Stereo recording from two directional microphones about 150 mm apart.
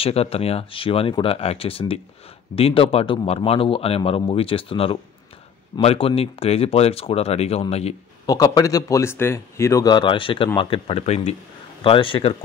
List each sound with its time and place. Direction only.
0.0 s speech: 40° left (ahead or behind)
8.3 s speech: 25° left (ahead or behind)